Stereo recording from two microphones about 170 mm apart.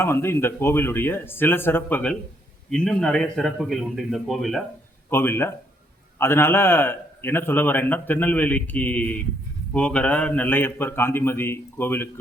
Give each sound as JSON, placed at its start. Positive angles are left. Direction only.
{"t": 0.0, "sound": "a man's voice", "side_deg": 15}
{"t": 5.0, "sound": "a man's voice", "side_deg": 15}